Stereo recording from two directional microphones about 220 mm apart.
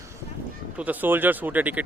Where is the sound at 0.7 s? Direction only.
5° right (ahead or behind).